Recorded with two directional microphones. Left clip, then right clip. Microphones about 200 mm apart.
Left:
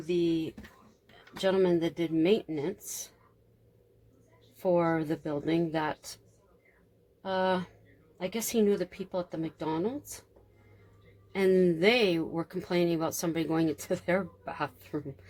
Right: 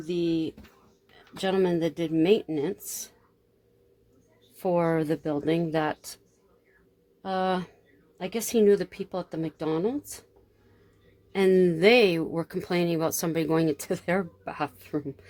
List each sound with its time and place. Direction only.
0.0 s speech: 40° right (ahead or behind)
4.6 s speech: 45° right (ahead or behind)
7.2 s speech: 45° right (ahead or behind)
11.3 s speech: 45° right (ahead or behind)